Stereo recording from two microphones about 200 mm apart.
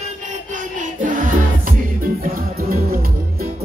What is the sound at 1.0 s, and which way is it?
Music, 40° right (ahead or behind).